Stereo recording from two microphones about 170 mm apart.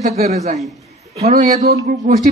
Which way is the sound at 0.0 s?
40° right (ahead or behind).